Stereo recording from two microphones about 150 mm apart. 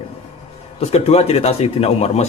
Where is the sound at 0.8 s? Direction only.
45° left (ahead or behind).